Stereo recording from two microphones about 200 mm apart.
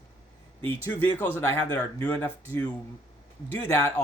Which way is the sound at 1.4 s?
10° left (ahead or behind).